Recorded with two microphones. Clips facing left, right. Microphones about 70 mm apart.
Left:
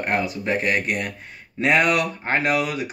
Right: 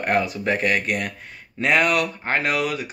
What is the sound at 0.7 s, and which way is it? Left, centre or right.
Speech, centre.